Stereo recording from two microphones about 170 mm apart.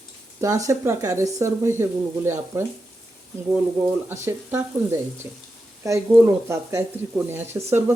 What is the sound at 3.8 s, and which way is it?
Speech, 15° right (ahead or behind).